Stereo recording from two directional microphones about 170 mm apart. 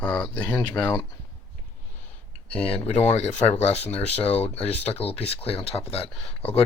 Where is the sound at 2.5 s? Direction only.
35° left (ahead or behind).